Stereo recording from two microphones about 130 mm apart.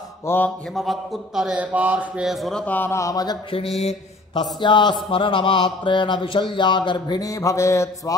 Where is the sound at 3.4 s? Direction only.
45° left (ahead or behind).